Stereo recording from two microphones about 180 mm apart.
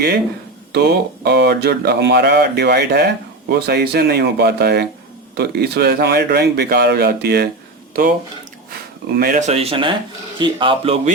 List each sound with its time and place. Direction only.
0.7 s a man's voice: 65° right (ahead or behind)
9.1 s speech: 55° right (ahead or behind)
9.5 s speech: 35° right (ahead or behind)